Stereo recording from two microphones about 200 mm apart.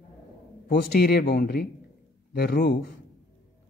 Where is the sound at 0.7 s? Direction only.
50° left (ahead or behind).